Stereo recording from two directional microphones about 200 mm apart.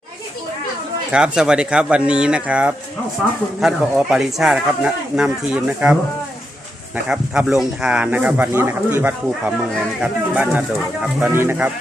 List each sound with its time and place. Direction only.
1.1 s speech: 5° right (ahead or behind)